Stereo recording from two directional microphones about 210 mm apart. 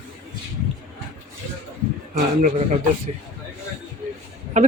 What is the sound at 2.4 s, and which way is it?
Speech, 40° right (ahead or behind).